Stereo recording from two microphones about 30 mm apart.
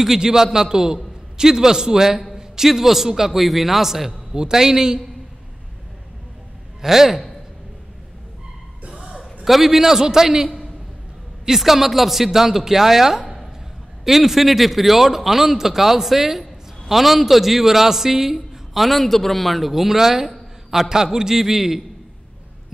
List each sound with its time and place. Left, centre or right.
0.2 s a man's voice: centre
2.3 s a sound: centre
2.7 s a man's voice: centre
4.3 s a man's voice: centre
6.8 s a man's voice: centre
9.4 s a man's voice: centre
11.4 s a man's voice: centre
18.8 s a man's voice: centre
20.2 s a sound: centre
20.9 s a man's voice: centre